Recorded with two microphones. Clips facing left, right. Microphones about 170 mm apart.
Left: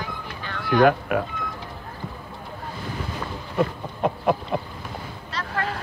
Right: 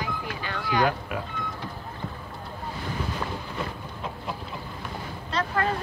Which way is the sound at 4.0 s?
60° left (ahead or behind).